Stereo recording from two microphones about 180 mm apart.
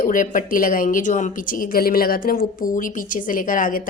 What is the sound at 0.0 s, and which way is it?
Speech, 50° left (ahead or behind).